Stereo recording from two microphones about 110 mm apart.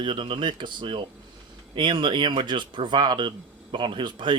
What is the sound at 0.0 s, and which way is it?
Speech, 50° right (ahead or behind).